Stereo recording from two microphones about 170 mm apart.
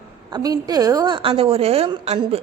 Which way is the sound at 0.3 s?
25° right (ahead or behind).